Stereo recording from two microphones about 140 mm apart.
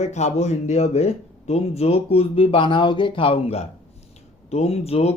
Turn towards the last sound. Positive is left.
turn(degrees=50)  # may be behind; listen again after turning